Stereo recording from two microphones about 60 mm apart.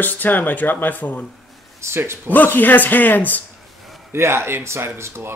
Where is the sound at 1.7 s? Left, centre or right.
Right.